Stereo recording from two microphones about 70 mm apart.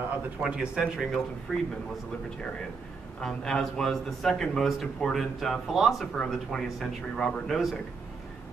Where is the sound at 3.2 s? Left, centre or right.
Centre.